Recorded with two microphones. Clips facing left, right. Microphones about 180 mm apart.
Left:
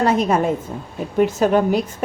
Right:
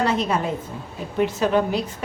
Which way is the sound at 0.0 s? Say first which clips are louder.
Left 5 dB; 45° left (ahead or behind).